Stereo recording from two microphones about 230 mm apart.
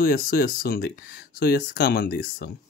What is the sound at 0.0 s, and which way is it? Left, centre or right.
Speech, left.